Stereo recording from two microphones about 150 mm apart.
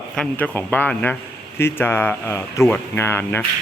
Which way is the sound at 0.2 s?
10° left (ahead or behind).